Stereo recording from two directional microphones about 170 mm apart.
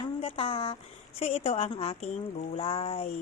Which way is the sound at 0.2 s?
35° left (ahead or behind).